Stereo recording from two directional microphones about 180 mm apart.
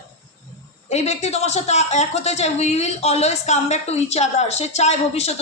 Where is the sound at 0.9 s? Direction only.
35° left (ahead or behind).